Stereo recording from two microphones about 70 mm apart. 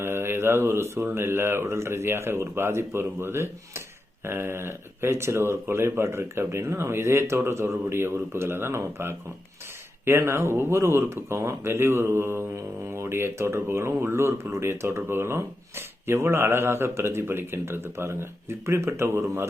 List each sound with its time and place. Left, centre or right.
0.0 s mantra: right
1.1 s speech: right